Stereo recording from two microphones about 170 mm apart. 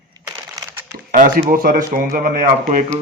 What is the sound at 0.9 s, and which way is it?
Speech, 55° right (ahead or behind).